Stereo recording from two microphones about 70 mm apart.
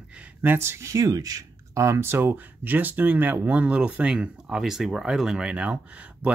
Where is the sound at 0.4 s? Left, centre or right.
Right; by 5.8 s centre.